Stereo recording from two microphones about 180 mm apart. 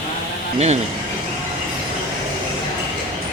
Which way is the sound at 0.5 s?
35° right (ahead or behind).